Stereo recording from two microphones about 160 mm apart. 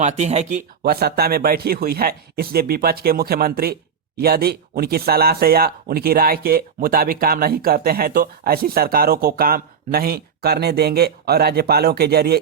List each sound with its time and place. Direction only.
0.0 s speech: 45° right (ahead or behind)
0.8 s speech: 85° right